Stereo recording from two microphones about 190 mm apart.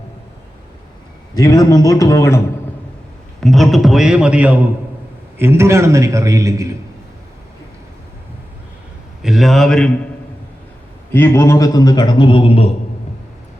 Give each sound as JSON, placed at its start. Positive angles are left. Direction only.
{"t": 1.4, "sound": "a man's voice", "side_deg": 20}
{"t": 3.4, "sound": "a man's voice", "side_deg": 0}
{"t": 9.2, "sound": "a man's voice", "side_deg": 0}
{"t": 11.1, "sound": "a man's voice", "side_deg": 15}